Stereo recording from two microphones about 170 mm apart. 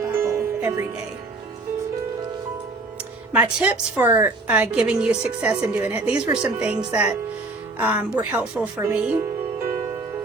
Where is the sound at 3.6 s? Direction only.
10° right (ahead or behind).